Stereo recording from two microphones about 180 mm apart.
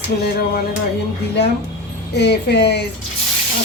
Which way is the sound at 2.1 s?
65° left (ahead or behind).